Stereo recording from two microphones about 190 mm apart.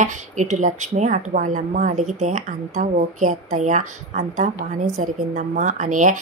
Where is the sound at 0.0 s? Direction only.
40° right (ahead or behind).